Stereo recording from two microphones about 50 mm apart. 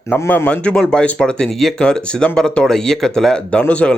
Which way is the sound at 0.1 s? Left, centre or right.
Left.